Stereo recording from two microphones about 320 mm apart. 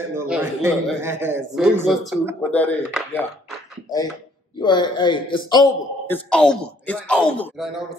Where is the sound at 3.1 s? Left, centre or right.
Centre.